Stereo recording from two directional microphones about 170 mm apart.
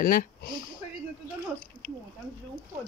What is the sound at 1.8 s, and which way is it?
Speech, 55° left (ahead or behind).